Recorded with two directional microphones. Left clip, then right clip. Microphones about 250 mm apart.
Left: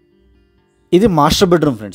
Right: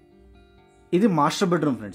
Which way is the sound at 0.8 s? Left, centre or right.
Left.